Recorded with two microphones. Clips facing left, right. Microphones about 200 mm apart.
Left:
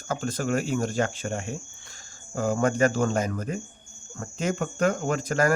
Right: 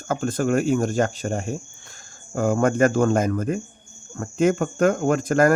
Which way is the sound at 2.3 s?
50° right (ahead or behind).